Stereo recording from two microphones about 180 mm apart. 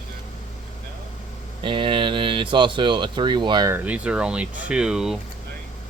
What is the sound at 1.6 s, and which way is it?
Speech, 25° right (ahead or behind).